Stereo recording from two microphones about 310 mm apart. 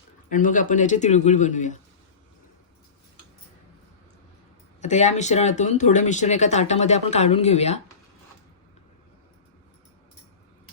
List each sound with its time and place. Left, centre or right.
0.3 s speech: left
4.8 s speech: left